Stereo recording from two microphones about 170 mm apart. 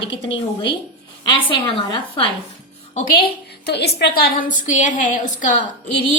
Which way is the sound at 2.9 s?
60° left (ahead or behind).